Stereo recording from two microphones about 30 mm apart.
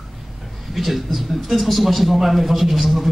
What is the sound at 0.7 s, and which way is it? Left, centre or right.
Speech, centre.